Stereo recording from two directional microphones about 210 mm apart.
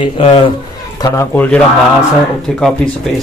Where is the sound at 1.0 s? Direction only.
15° left (ahead or behind).